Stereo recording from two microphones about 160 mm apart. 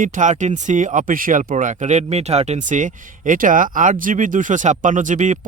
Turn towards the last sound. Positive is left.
turn(degrees=-50)  # may be behind; listen again after turning